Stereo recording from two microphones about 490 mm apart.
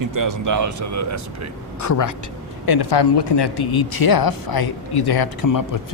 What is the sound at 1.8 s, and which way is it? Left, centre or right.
Speech, left.